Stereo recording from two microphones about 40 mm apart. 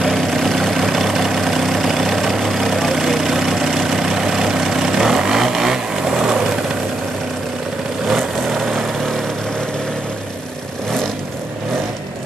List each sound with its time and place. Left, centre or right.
0.0 s vehicle: centre
8.1 s vehicle: centre